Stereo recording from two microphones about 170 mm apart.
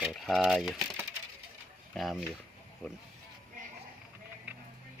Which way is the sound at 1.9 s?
Centre (ahead or behind).